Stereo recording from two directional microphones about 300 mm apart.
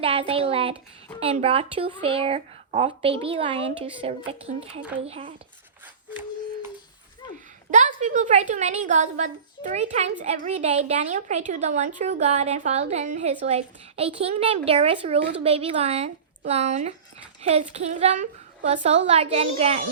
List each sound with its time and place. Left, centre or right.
0.0 s a woman's voice: centre
6.1 s a sound: centre
7.7 s a woman's voice: right